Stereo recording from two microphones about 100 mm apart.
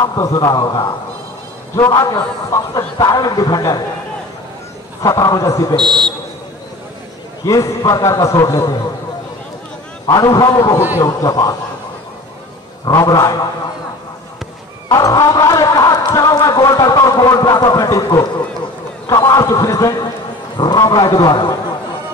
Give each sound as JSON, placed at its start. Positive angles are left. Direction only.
{"t": 0.0, "sound": "speech", "side_deg": 35}
{"t": 5.0, "sound": "speech", "side_deg": 35}
{"t": 5.8, "sound": "a man's voice", "side_deg": 5}
{"t": 7.4, "sound": "speech", "side_deg": 35}
{"t": 10.1, "sound": "speech", "side_deg": 40}
{"t": 12.9, "sound": "speech", "side_deg": 35}
{"t": 14.9, "sound": "a man's voice", "side_deg": 35}